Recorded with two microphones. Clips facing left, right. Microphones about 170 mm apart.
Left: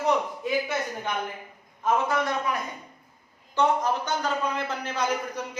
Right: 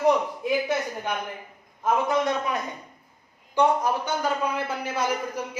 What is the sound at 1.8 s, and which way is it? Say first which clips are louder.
A man's voice: right 2 dB; 20° right (ahead or behind).